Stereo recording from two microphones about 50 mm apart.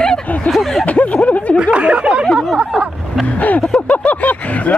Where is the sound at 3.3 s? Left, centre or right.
Left.